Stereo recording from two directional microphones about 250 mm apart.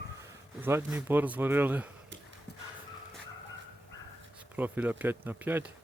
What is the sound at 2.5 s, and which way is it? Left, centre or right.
Horse, left.